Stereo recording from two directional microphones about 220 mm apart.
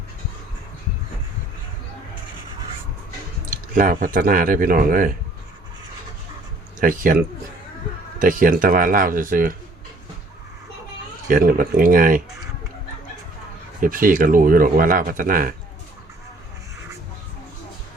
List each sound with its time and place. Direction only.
3.5 s speech: 40° right (ahead or behind)
6.7 s speech: 40° right (ahead or behind)
8.2 s speech: 40° right (ahead or behind)
11.3 s speech: 40° right (ahead or behind)
13.8 s speech: 40° right (ahead or behind)